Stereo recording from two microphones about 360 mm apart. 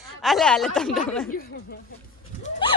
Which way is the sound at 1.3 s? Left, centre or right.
Left.